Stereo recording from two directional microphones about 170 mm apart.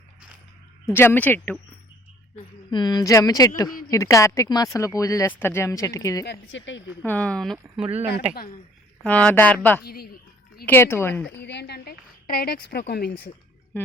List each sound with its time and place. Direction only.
0.9 s a woman's voice: 15° left (ahead or behind)
2.6 s speech: 25° left (ahead or behind)
6.2 s speech: 90° left
7.0 s speech: 10° left (ahead or behind)
9.0 s a woman's voice: 10° left (ahead or behind)
9.8 s speech: 65° left (ahead or behind)
10.7 s a woman's voice: 15° left (ahead or behind)
11.3 s a woman's voice: 90° left; by 13.3 s 65° left (ahead or behind)